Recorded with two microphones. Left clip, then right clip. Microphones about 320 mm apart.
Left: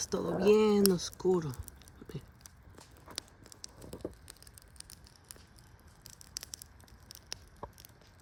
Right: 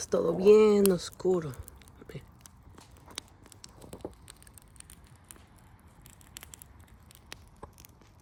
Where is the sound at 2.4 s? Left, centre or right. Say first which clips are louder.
Right 1 dB; right.